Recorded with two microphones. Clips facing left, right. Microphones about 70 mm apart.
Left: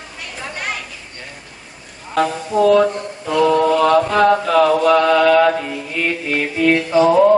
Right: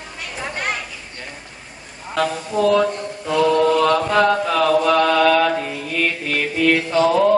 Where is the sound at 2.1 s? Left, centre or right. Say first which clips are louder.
Left 3 dB; centre.